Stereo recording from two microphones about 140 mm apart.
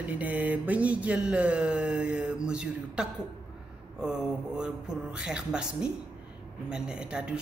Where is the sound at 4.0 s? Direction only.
5° right (ahead or behind).